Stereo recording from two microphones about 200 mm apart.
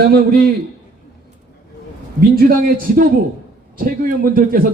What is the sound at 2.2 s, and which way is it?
A man's voice, 45° right (ahead or behind).